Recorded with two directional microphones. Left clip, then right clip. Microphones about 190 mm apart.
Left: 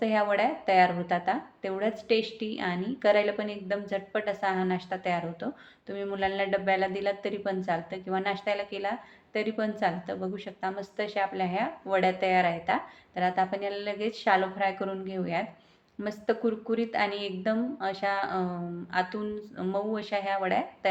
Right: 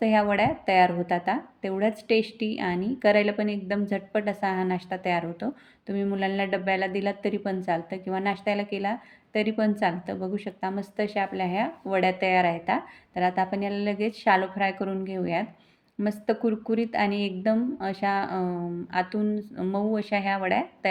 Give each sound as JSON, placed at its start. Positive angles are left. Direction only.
{"t": 0.0, "sound": "a woman's voice", "side_deg": -45}